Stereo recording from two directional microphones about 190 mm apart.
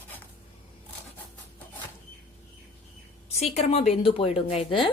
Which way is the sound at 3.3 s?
35° left (ahead or behind).